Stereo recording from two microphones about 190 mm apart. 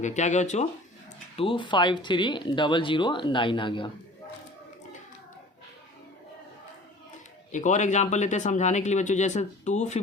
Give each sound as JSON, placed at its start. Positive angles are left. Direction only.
{"t": 0.0, "sound": "speech", "side_deg": 40}
{"t": 1.4, "sound": "speech", "side_deg": 25}
{"t": 7.5, "sound": "speech", "side_deg": 40}